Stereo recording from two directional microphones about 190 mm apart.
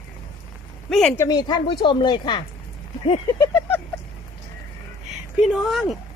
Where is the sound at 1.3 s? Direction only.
20° left (ahead or behind).